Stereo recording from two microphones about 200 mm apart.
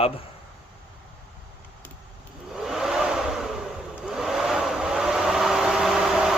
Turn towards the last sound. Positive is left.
turn(degrees=-5)  # may be behind; listen again after turning